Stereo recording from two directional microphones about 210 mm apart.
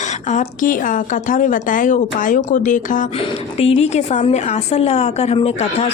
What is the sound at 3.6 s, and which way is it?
A woman's voice, 30° left (ahead or behind).